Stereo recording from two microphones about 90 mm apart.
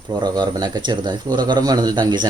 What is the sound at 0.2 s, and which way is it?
Speech, 50° right (ahead or behind).